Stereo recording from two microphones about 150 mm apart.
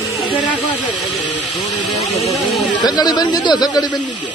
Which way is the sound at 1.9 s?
Centre (ahead or behind).